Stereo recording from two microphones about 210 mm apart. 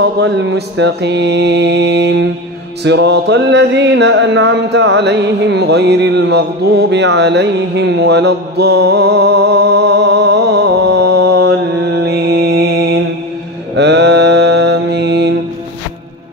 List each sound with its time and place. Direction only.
0.2 s mantra: 60° right (ahead or behind)
2.8 s music: 55° right (ahead or behind)
12.1 s mantra: 50° right (ahead or behind)